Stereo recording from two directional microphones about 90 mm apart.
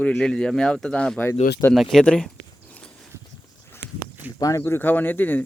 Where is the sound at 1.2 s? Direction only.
25° left (ahead or behind).